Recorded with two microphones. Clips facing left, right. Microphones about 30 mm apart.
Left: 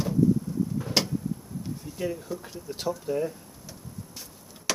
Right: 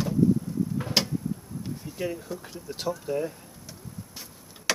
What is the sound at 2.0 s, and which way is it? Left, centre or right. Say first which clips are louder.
Speech: left 1 dB; centre.